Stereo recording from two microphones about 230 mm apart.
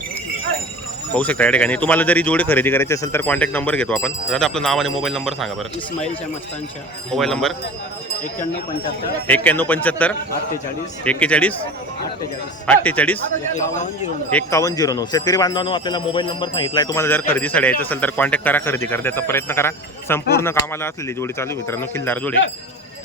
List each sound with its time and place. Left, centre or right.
1.1 s speech: centre
7.1 s speech: centre
9.2 s speech: centre
12.6 s speech: centre
13.5 s a man's voice: left
14.3 s speech: centre